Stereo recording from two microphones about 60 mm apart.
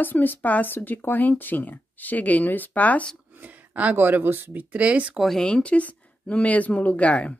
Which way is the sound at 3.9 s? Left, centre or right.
Right.